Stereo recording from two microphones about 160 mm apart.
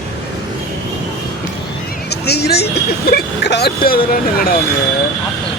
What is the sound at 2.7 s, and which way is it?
Speech, 80° left.